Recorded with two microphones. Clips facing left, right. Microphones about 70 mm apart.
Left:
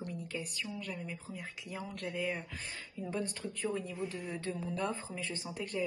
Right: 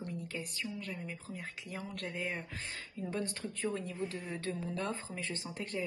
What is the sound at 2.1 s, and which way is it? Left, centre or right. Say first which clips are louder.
Speech: left 3 dB; right.